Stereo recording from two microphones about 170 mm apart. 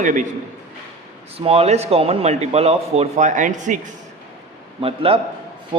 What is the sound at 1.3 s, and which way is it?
Speech, 35° right (ahead or behind).